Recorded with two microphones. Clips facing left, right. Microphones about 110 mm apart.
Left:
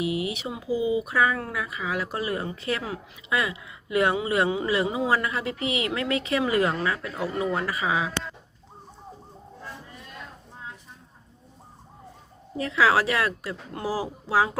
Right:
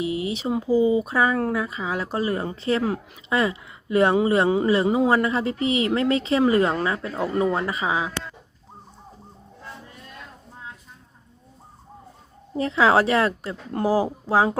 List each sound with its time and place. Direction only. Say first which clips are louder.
0.0 s speech: right 2 dB; 30° right (ahead or behind)
12.5 s speech: right 3 dB; 30° right (ahead or behind)